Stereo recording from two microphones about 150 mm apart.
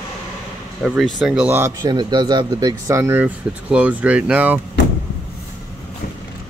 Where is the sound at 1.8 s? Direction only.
30° right (ahead or behind); by 4.6 s 10° right (ahead or behind).